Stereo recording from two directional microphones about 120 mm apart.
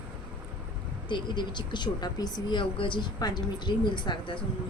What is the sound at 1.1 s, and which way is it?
A woman's voice, 40° left (ahead or behind).